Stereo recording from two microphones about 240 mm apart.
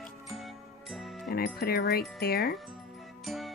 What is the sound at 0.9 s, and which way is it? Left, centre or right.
Music, centre.